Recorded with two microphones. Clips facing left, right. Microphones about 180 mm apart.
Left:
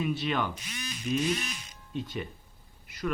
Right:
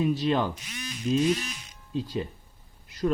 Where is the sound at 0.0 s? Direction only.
35° right (ahead or behind).